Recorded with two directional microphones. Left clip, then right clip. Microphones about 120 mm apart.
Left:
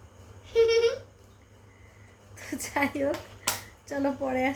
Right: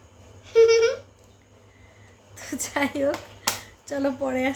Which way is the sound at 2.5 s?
15° right (ahead or behind).